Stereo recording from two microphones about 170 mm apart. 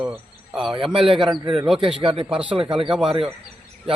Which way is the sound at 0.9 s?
30° right (ahead or behind).